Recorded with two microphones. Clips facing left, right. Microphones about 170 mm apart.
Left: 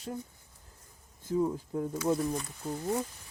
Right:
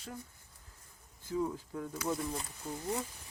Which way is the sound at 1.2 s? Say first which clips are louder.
Left 5 dB; 35° left (ahead or behind).